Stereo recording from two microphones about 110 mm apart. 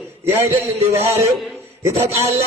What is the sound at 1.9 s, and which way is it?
Speech, 70° right (ahead or behind).